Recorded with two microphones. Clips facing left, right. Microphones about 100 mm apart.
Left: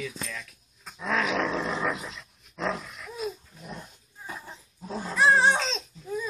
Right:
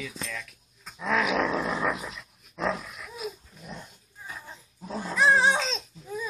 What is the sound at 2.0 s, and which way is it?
Dog, 10° right (ahead or behind).